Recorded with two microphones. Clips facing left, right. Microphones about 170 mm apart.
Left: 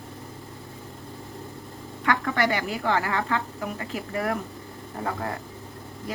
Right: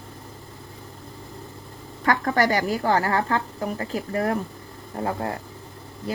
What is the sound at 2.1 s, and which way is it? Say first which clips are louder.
A woman's voice: right 3 dB; 40° right (ahead or behind).